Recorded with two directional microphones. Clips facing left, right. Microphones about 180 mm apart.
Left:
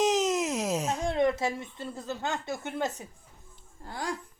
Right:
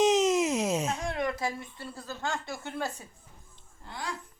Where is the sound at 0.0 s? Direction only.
Centre (ahead or behind).